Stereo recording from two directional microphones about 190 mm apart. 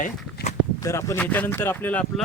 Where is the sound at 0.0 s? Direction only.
45° left (ahead or behind).